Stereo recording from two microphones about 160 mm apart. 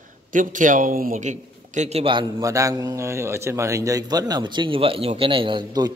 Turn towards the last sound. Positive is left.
turn(degrees=-25)  # may be behind; listen again after turning